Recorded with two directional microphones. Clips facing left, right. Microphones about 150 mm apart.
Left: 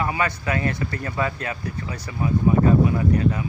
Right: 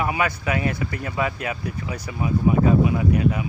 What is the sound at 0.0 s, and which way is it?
Speech, 10° right (ahead or behind).